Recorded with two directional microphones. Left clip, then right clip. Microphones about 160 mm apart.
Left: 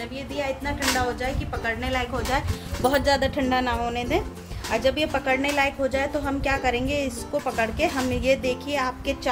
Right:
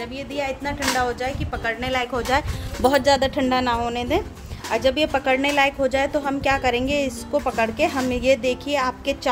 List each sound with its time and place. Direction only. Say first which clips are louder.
0.4 s speech: right 2 dB; 80° right
2.8 s a woman's voice: right 4 dB; 45° right (ahead or behind)